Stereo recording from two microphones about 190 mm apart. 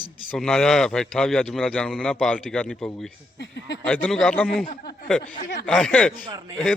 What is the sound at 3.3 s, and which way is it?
Speech, 65° left (ahead or behind).